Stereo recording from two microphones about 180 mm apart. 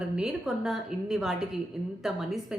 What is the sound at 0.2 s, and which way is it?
A man's voice, 5° right (ahead or behind).